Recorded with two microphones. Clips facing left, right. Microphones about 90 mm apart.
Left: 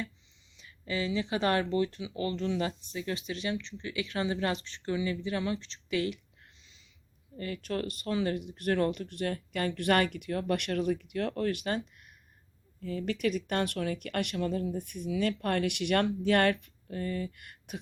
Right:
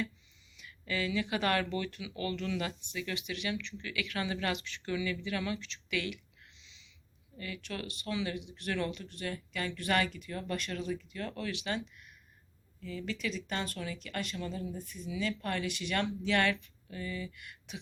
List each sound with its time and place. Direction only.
0.5 s speech: 30° left (ahead or behind)
6.6 s a sound: 45° left (ahead or behind)
7.3 s speech: 40° left (ahead or behind)